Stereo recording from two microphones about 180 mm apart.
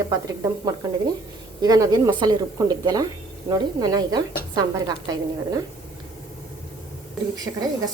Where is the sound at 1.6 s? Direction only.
20° right (ahead or behind).